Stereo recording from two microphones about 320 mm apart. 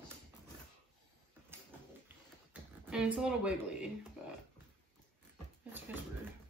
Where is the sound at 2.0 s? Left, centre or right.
Centre.